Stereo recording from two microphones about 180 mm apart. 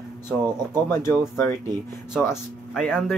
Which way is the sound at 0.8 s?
15° left (ahead or behind).